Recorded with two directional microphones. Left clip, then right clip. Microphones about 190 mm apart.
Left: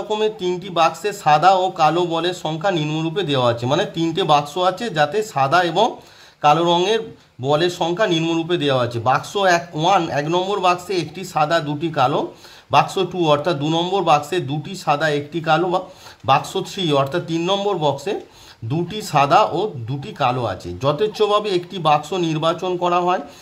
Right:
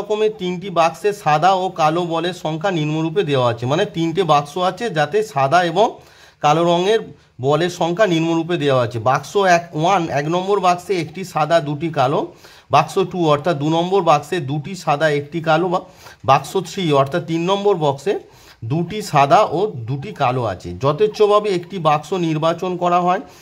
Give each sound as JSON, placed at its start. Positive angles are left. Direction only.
{"t": 0.1, "sound": "speech", "side_deg": -20}